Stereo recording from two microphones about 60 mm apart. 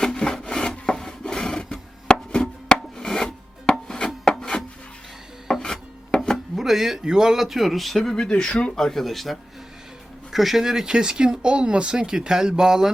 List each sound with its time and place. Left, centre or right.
0.0 s rub: centre
2.3 s filing: centre
6.6 s a man's voice: centre